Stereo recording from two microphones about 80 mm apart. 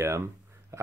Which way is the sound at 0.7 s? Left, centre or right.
Right.